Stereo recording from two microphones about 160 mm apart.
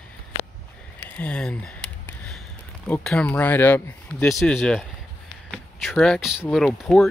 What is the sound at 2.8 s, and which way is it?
Speech, 5° left (ahead or behind).